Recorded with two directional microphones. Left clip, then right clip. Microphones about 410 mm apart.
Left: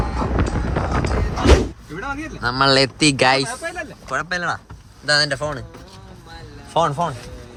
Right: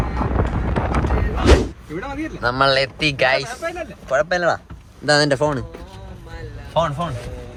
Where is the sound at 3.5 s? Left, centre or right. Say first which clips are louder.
Right 1 dB; left.